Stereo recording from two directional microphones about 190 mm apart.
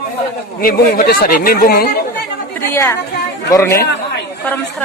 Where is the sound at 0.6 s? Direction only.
50° left (ahead or behind).